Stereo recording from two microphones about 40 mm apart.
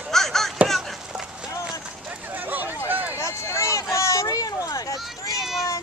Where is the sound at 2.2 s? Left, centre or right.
Right.